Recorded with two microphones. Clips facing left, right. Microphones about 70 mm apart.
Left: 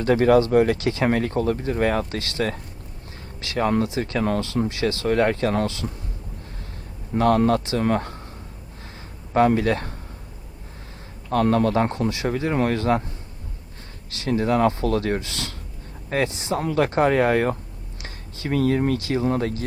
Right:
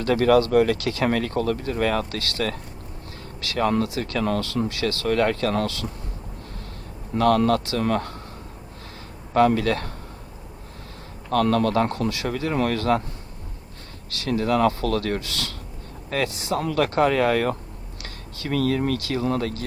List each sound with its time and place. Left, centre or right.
0.0 s speech: left
7.2 s speech: left
9.3 s speech: left
11.3 s speech: left
14.1 s speech: left